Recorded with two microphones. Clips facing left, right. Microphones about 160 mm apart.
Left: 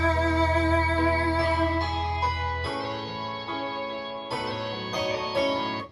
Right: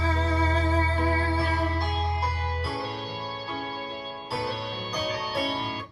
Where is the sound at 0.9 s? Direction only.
30° left (ahead or behind).